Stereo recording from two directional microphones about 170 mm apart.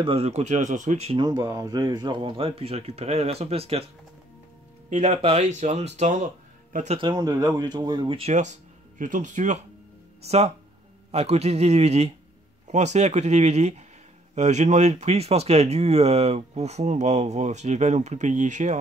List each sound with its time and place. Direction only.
0.0 s speech: 35° right (ahead or behind)
1.2 s speech: 20° right (ahead or behind); by 7.0 s 45° right (ahead or behind)
7.0 s speech: 25° right (ahead or behind); by 18.8 s 45° right (ahead or behind)